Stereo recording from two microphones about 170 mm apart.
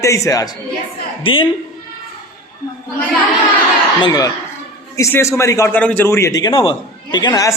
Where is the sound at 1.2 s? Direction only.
30° left (ahead or behind).